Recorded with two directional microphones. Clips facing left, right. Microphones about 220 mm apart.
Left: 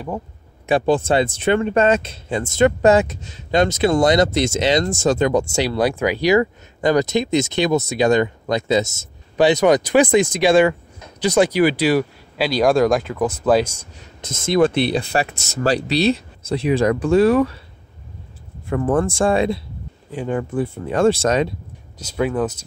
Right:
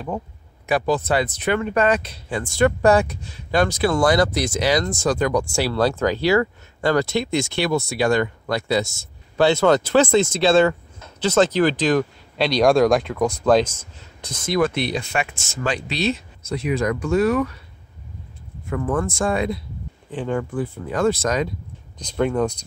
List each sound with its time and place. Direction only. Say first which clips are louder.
0.7 s speech: left 4 dB; 25° left (ahead or behind); by 13.8 s 10° left (ahead or behind)
14.2 s speech: left 4 dB; 25° left (ahead or behind)
18.7 s speech: left 4 dB; 30° left (ahead or behind)
20.1 s speech: left 1 dB; 15° left (ahead or behind)
21.9 s speech: even; 5° left (ahead or behind)